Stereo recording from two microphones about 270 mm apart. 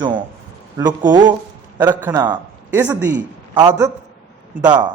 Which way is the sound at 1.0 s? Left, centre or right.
Centre.